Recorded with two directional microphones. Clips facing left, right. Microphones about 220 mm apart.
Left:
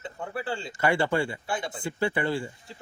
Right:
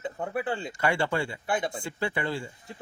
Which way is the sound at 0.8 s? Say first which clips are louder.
Left 3 dB; 5° left (ahead or behind).